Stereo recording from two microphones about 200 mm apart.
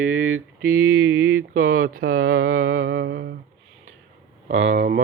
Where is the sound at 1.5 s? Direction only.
45° right (ahead or behind).